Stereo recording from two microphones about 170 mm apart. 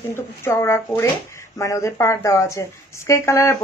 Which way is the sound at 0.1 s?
15° left (ahead or behind).